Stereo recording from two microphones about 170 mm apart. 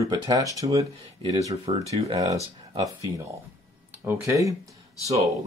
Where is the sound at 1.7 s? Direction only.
35° right (ahead or behind).